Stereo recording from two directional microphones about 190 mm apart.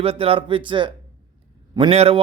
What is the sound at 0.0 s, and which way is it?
A man's voice, 30° right (ahead or behind).